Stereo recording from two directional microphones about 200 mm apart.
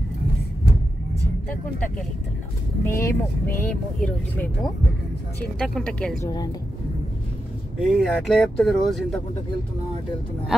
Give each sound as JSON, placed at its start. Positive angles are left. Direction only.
{"t": 2.8, "sound": "speech", "side_deg": 10}
{"t": 5.6, "sound": "speech", "side_deg": 5}
{"t": 6.2, "sound": "speech", "side_deg": 20}
{"t": 7.9, "sound": "speech", "side_deg": 0}